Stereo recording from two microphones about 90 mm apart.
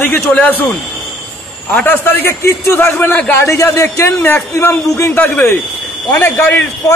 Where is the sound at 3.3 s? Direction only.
30° left (ahead or behind).